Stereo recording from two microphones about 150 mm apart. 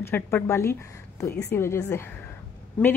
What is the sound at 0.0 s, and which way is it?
A woman's voice, 15° left (ahead or behind).